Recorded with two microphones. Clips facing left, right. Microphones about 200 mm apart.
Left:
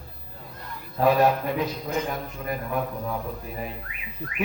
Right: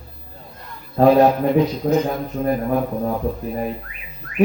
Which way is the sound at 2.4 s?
40° right (ahead or behind).